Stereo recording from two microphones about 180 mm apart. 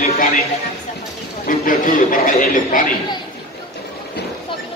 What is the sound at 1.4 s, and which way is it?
A man's voice, 50° left (ahead or behind).